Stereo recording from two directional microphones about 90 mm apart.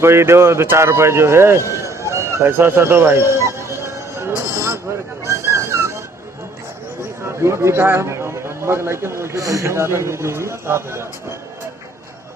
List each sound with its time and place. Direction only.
0.0 s speech: 30° right (ahead or behind)
3.4 s music: 30° right (ahead or behind)
5.2 s a sound: 35° right (ahead or behind)
7.4 s a man's voice: 30° right (ahead or behind)